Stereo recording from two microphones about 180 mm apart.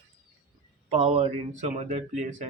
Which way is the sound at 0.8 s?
35° right (ahead or behind).